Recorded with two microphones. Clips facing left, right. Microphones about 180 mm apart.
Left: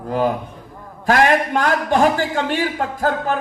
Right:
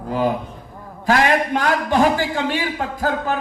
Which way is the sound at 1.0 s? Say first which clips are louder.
Left 2 dB; 45° left (ahead or behind).